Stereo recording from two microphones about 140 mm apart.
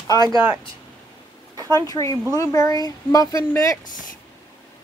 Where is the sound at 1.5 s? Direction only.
25° right (ahead or behind).